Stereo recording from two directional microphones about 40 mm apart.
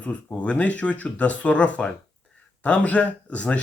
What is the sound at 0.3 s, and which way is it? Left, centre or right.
Speech, left.